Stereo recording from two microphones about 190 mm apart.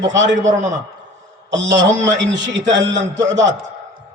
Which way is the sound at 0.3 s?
40° right (ahead or behind).